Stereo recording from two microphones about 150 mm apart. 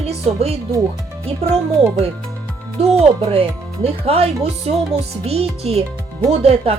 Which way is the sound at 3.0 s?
40° right (ahead or behind).